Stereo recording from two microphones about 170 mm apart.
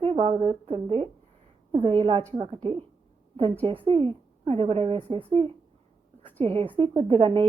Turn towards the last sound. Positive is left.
turn(degrees=-30)  # may be behind; listen again after turning